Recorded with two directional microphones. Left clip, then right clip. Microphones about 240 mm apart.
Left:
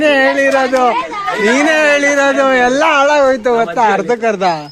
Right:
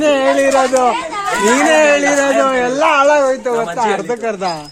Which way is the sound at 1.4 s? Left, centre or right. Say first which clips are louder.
Even; centre.